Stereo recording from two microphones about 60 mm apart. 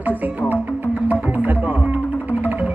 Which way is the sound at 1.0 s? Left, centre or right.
Right.